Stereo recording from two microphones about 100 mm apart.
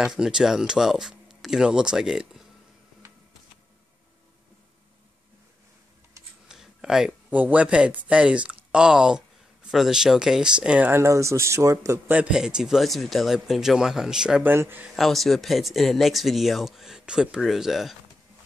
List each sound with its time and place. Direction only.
0.0 s speech: 5° right (ahead or behind)
6.5 s a sound: 5° right (ahead or behind)
7.3 s speech: 15° right (ahead or behind)
10.9 s speech: 30° right (ahead or behind)
12.1 s speech: 10° right (ahead or behind)
14.4 s speech: 20° right (ahead or behind)
15.0 s speech: centre (ahead or behind)